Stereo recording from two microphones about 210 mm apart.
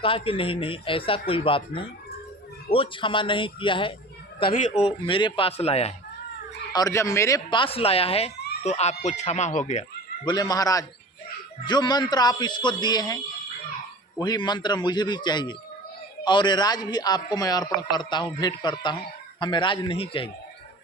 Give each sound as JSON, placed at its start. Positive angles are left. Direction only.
{"t": 0.0, "sound": "a man's voice", "side_deg": 25}
{"t": 6.7, "sound": "a man's voice", "side_deg": 15}
{"t": 10.2, "sound": "a man's voice", "side_deg": 20}